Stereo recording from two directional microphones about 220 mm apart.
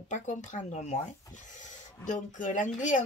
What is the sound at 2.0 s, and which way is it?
Speech, 35° left (ahead or behind).